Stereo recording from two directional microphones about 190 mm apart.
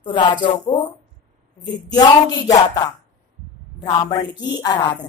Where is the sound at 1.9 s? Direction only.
20° left (ahead or behind).